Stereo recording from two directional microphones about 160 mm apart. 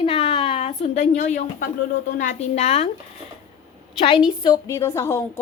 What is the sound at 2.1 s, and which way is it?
Speech, 50° left (ahead or behind).